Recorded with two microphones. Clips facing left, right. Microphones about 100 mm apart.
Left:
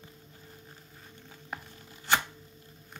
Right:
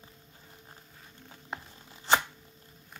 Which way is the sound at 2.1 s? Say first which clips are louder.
Right 2 dB; 25° right (ahead or behind).